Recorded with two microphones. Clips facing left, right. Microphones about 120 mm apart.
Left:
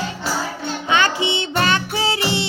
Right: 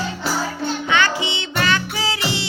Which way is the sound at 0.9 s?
20° left (ahead or behind).